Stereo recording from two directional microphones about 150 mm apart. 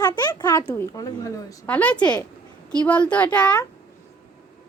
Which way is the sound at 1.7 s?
10° left (ahead or behind).